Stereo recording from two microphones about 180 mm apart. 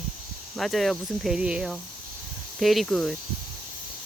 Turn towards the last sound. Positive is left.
turn(degrees=5)  # may be behind; listen again after turning